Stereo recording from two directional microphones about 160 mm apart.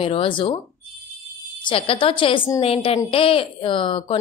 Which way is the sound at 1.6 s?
35° left (ahead or behind).